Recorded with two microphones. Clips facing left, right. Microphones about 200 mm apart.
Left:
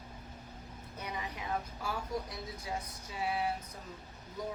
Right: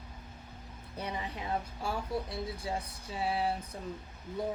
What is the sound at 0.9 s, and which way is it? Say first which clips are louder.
A woman's voice: right 3 dB; 30° right (ahead or behind).